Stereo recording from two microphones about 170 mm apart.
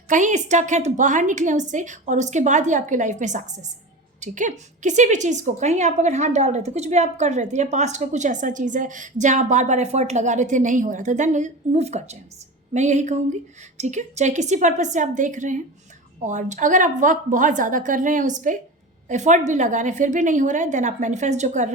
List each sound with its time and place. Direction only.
0.1 s a woman's voice: 45° right (ahead or behind)